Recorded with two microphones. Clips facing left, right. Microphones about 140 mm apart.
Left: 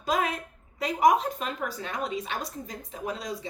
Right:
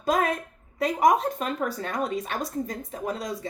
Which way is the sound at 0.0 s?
50° right (ahead or behind).